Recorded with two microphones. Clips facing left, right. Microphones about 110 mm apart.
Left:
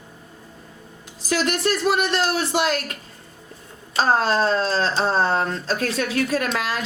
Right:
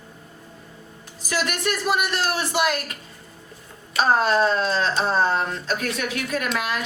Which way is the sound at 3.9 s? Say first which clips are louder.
Even; 30° left (ahead or behind).